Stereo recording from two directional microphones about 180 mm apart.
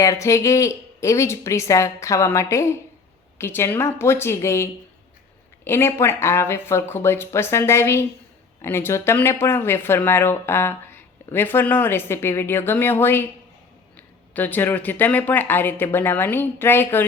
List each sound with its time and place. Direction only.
0.0 s speech: 15° left (ahead or behind)